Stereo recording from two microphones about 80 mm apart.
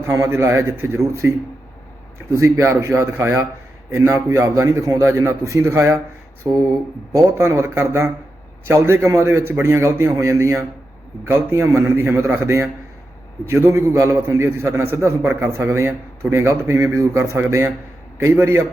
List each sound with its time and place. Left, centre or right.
0.0 s a man's voice: right